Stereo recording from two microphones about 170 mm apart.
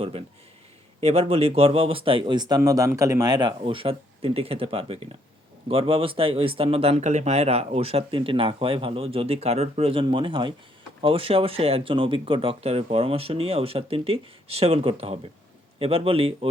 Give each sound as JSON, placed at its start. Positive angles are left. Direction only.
{"t": 0.0, "sound": "speech", "side_deg": -35}